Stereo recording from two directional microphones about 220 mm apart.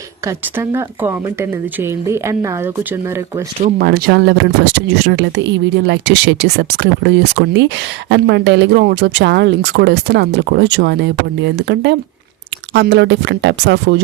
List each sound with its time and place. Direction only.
0.3 s speech: 10° right (ahead or behind)
3.6 s speech: 45° right (ahead or behind)